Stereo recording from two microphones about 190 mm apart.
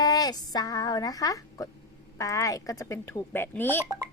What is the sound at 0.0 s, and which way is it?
Speech, 20° left (ahead or behind).